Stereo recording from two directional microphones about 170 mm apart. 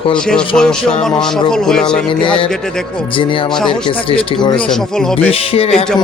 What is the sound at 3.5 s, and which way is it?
Speech, 5° left (ahead or behind).